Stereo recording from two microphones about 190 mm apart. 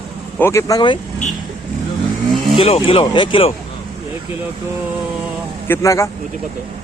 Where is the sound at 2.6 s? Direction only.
30° left (ahead or behind).